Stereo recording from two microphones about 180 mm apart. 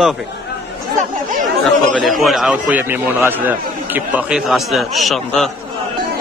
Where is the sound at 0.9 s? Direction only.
45° right (ahead or behind).